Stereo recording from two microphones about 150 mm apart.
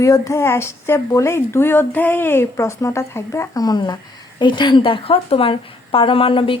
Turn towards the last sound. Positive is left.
turn(degrees=35)  # may be behind; listen again after turning